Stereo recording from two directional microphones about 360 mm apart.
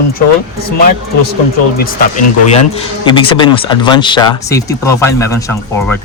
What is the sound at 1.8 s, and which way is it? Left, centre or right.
Speech, left.